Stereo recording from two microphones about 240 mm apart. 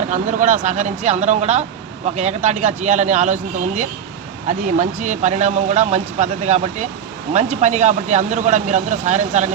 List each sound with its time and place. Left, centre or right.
0.1 s speech: right